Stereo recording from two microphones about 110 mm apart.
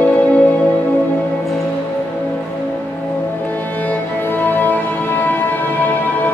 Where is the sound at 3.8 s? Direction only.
15° left (ahead or behind).